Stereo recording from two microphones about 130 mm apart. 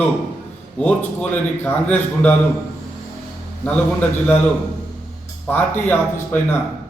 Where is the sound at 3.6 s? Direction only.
10° left (ahead or behind).